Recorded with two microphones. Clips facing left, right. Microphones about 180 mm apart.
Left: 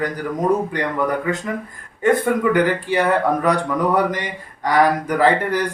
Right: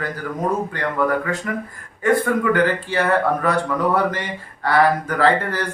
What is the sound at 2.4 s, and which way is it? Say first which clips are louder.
Speech: left 1 dB; 15° left (ahead or behind).